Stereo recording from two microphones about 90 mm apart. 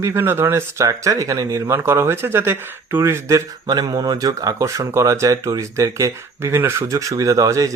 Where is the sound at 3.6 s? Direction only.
50° right (ahead or behind).